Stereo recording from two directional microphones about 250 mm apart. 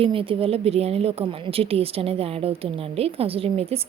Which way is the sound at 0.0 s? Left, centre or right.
Right.